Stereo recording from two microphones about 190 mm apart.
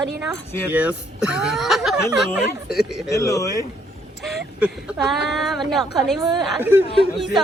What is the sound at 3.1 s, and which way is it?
Speech, 15° left (ahead or behind).